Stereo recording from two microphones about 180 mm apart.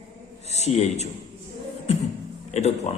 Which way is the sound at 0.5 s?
40° left (ahead or behind).